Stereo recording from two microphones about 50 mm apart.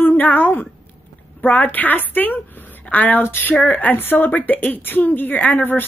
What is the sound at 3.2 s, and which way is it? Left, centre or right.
Speech, left.